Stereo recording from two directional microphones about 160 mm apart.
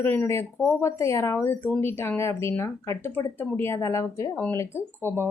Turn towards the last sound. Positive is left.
turn(degrees=15)  # may be behind; listen again after turning